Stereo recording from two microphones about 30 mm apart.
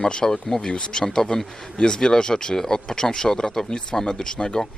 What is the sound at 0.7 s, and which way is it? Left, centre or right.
Speech, left.